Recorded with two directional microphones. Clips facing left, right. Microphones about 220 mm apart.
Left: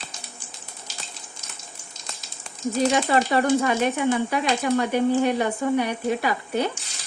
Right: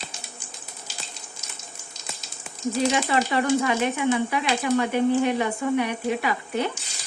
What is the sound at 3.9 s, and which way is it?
Speech, 45° left (ahead or behind).